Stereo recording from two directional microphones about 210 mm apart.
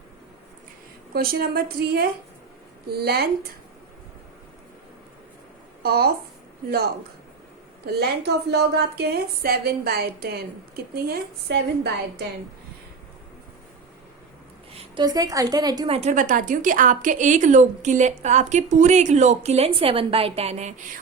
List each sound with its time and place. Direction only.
1.1 s speech: 45° right (ahead or behind)
5.8 s speech: 50° right (ahead or behind)
14.7 s a woman's voice: 25° right (ahead or behind)
16.0 s a woman's voice: 35° right (ahead or behind)